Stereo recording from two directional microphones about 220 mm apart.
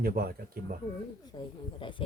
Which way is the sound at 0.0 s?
45° right (ahead or behind).